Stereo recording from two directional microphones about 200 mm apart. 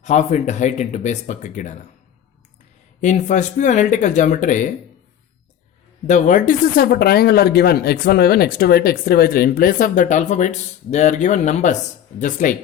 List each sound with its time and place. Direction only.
0.0 s speech: 35° left (ahead or behind)
3.0 s speech: 35° left (ahead or behind)
6.1 s speech: 40° left (ahead or behind)